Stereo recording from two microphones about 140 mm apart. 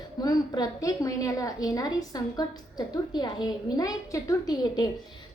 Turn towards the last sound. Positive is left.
turn(degrees=30)  # may be behind; listen again after turning